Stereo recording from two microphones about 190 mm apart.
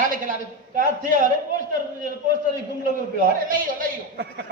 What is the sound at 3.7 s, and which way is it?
Speech, 55° right (ahead or behind).